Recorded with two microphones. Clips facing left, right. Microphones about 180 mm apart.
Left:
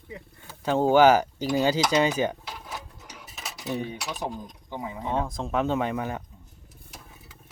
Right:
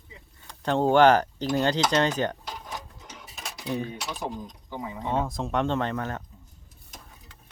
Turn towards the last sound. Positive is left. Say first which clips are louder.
# left 1 dB
turn(degrees=10)  # may be behind; listen again after turning